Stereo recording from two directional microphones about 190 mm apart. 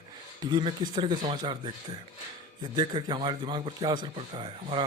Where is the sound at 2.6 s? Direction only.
25° right (ahead or behind).